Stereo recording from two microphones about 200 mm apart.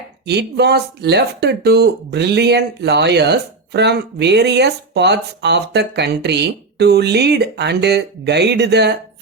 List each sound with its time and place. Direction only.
0.3 s speech: 55° right (ahead or behind)